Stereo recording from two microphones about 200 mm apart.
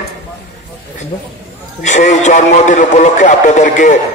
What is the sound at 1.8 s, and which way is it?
A man's voice, 35° left (ahead or behind).